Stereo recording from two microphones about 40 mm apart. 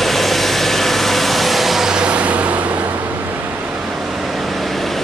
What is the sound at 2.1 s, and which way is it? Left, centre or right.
Vehicle, right.